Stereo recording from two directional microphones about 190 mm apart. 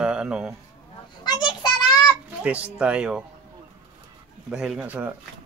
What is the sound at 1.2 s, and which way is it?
Speech, 25° left (ahead or behind).